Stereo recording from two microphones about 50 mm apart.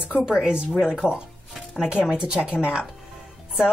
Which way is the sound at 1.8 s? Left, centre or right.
Centre.